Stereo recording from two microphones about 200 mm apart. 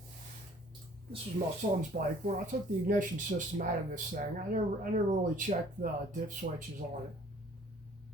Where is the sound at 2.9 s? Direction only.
40° right (ahead or behind).